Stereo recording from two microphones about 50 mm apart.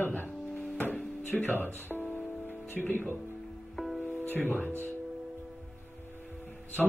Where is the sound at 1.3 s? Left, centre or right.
Left.